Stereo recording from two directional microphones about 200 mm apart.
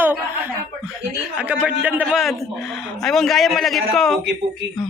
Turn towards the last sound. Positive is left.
turn(degrees=0)  # may be behind; listen again after turning